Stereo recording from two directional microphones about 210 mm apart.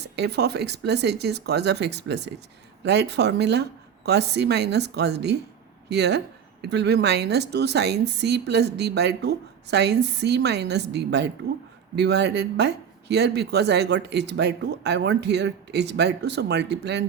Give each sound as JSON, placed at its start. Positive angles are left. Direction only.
{"t": 0.0, "sound": "a woman's voice", "side_deg": -50}